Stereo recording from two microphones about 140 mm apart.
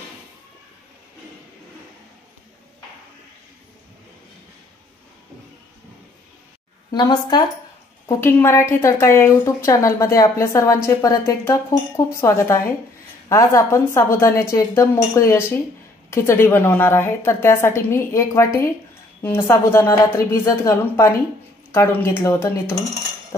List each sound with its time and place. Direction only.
6.9 s speech: 30° left (ahead or behind)
8.1 s speech: 20° left (ahead or behind)